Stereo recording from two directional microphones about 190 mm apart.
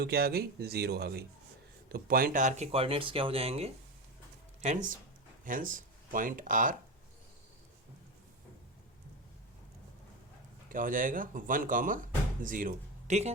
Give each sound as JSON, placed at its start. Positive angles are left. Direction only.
{"t": 0.0, "sound": "speech", "side_deg": -55}
{"t": 10.7, "sound": "speech", "side_deg": -45}